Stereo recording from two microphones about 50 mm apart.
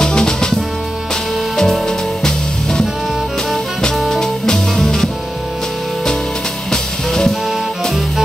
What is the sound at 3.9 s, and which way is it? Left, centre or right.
Music, centre.